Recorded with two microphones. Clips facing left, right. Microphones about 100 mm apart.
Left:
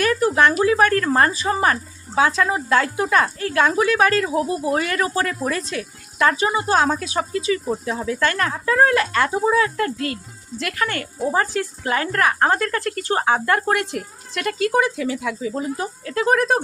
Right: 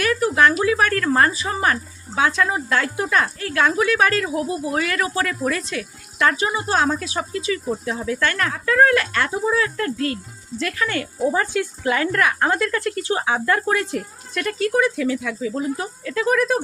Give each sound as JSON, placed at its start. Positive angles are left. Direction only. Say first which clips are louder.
{"t": 0.0, "sound": "a sound", "louder": "left 1 dB", "side_deg": 35}
{"t": 0.6, "sound": "speech", "louder": "left 2 dB", "side_deg": 35}
{"t": 10.6, "sound": "speech", "louder": "right 1 dB", "side_deg": 50}
{"t": 11.3, "sound": "speech", "louder": "left 1 dB", "side_deg": 35}
{"t": 14.8, "sound": "speech", "louder": "right 1 dB", "side_deg": 30}